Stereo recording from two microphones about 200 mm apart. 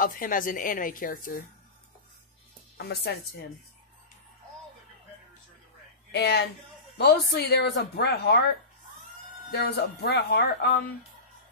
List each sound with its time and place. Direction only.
0.0 s speech: 45° left (ahead or behind)
2.8 s speech: 55° left (ahead or behind)
6.1 s speech: 55° left (ahead or behind)
9.5 s speech: 55° left (ahead or behind)